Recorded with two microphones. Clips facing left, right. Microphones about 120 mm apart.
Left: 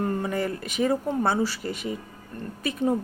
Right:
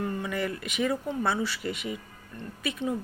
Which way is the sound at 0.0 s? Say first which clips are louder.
Left 4 dB; 40° left (ahead or behind).